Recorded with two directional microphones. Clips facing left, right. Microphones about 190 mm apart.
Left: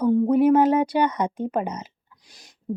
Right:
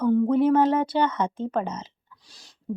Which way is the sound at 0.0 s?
15° left (ahead or behind).